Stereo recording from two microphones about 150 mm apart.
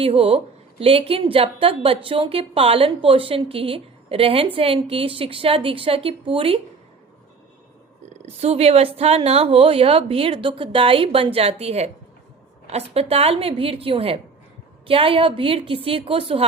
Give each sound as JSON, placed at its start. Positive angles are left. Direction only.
{"t": 0.0, "sound": "a woman's voice", "side_deg": -40}
{"t": 8.3, "sound": "a woman's voice", "side_deg": -45}